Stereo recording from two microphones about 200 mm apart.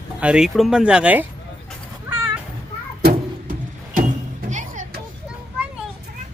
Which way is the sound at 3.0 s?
45° right (ahead or behind).